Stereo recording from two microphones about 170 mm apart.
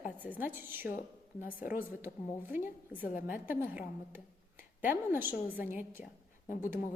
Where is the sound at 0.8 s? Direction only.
50° left (ahead or behind).